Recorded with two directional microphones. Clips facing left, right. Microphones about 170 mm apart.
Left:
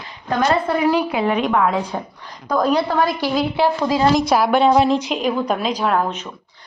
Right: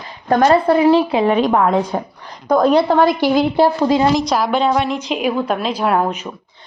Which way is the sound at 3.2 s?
45° right (ahead or behind).